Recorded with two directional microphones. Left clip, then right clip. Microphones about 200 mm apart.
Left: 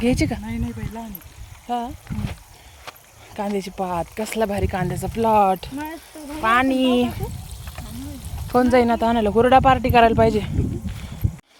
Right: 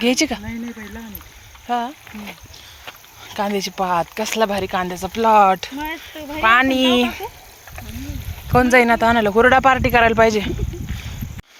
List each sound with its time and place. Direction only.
0.0 s speech: 10° left (ahead or behind)
1.6 s speech: 5° left (ahead or behind)
3.3 s speech: 5° left (ahead or behind)
8.5 s speech: 15° left (ahead or behind)